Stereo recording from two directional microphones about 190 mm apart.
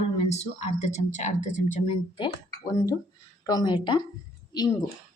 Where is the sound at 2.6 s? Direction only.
20° left (ahead or behind).